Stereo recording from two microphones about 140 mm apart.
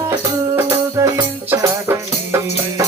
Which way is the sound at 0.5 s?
20° right (ahead or behind).